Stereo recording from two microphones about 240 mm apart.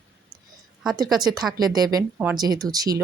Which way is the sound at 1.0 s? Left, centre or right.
Centre.